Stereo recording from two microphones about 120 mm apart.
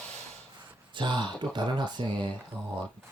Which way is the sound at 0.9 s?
40° right (ahead or behind).